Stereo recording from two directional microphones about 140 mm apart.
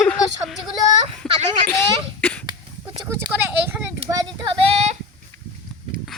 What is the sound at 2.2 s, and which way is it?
Cough, 10° left (ahead or behind).